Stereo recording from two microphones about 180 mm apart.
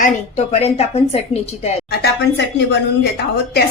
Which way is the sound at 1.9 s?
75° left (ahead or behind).